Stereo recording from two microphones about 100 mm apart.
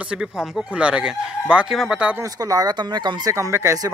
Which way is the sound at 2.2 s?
35° right (ahead or behind).